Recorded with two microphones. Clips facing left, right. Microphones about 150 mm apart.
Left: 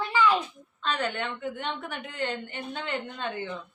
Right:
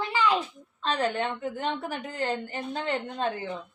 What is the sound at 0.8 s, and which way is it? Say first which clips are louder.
Child singing: right 3 dB; 35° right (ahead or behind).